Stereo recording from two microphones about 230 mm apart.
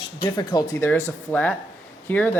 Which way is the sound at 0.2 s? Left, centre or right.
Centre.